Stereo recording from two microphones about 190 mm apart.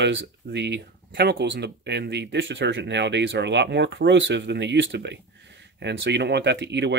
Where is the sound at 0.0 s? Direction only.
65° right (ahead or behind).